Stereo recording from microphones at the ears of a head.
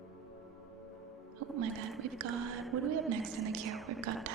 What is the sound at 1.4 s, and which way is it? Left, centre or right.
A woman's voice, right.